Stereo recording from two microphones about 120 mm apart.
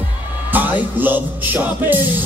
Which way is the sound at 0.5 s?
15° right (ahead or behind).